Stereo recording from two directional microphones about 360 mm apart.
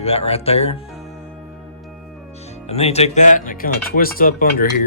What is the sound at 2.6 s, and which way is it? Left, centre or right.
Speech, centre.